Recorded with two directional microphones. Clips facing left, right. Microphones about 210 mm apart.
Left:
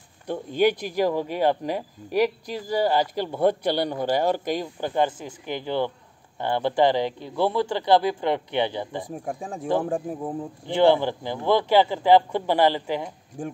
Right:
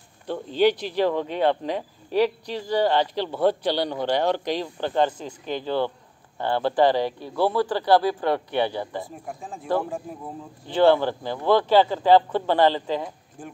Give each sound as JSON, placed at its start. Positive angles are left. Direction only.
{"t": 0.3, "sound": "speech", "side_deg": 10}